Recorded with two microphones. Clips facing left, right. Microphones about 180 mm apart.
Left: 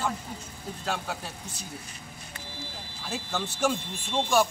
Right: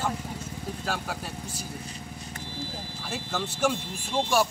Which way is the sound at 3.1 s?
5° right (ahead or behind).